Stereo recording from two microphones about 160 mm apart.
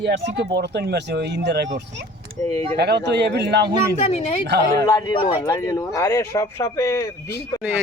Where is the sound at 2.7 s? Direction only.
90° right.